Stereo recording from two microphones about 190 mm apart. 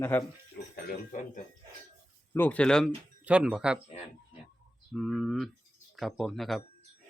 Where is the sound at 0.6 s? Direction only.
60° left (ahead or behind).